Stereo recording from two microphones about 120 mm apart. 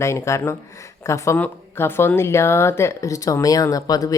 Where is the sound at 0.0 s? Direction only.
25° left (ahead or behind).